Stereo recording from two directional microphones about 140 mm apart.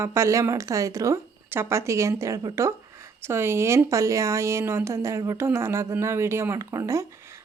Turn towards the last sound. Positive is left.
turn(degrees=-20)  # may be behind; listen again after turning